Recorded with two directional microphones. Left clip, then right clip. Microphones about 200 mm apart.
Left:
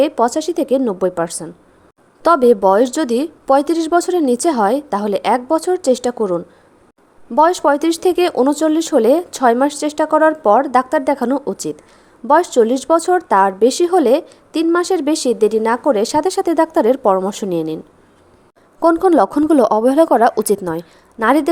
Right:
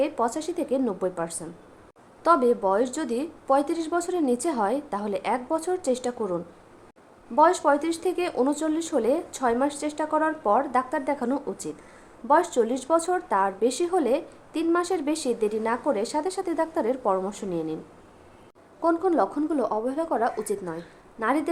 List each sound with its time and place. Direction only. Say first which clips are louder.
0.0 s speech: left 11 dB; 35° left (ahead or behind)
18.8 s a woman's voice: left 11 dB; 40° left (ahead or behind)